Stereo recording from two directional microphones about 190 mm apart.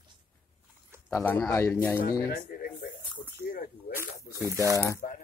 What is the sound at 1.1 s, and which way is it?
Speech, 10° left (ahead or behind).